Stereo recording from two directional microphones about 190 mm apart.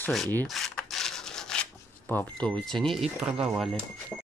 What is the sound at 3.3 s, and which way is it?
Speech, centre (ahead or behind).